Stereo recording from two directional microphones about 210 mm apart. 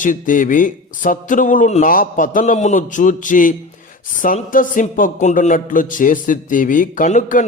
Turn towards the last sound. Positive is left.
turn(degrees=40)  # may be behind; listen again after turning